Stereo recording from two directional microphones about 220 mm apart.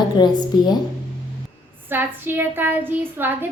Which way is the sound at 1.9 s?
10° right (ahead or behind).